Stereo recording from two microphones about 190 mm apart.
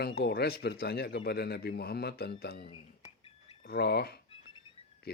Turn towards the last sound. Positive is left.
turn(degrees=60)  # may be behind; listen again after turning